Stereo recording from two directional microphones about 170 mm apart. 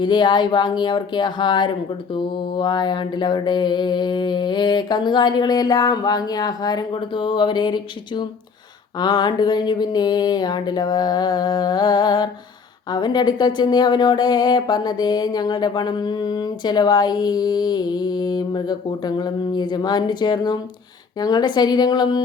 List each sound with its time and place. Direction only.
0.0 s speech: 25° left (ahead or behind)